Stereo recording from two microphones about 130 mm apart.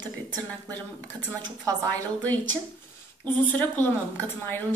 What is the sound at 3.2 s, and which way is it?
A woman's voice, 15° left (ahead or behind).